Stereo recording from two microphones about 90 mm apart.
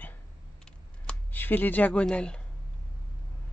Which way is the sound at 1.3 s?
20° left (ahead or behind).